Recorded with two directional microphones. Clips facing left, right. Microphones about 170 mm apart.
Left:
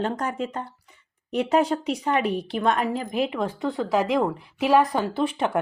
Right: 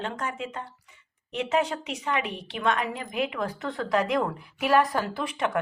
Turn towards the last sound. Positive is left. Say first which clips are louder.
# left 4 dB
turn(degrees=30)  # may be behind; listen again after turning